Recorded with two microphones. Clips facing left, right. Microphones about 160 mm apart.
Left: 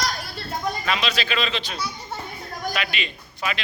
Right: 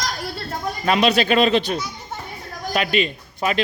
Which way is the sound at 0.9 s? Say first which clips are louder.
Right 12 dB; 50° right (ahead or behind).